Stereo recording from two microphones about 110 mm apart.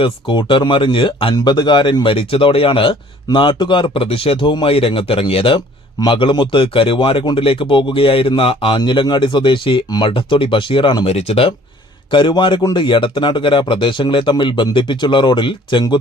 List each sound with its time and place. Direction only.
0.0 s speech: 50° left (ahead or behind)
11.0 s speech: 70° left (ahead or behind)
12.1 s speech: 45° left (ahead or behind)